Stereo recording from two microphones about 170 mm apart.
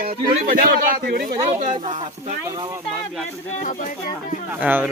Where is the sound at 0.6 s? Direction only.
60° right (ahead or behind).